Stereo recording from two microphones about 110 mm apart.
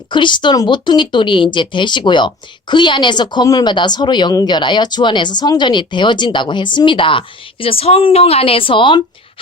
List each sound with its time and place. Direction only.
0.1 s speech: 45° left (ahead or behind)